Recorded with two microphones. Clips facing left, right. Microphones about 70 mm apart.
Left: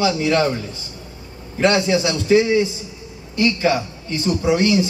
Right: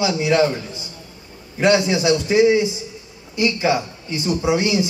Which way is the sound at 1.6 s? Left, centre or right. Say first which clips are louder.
Even; centre.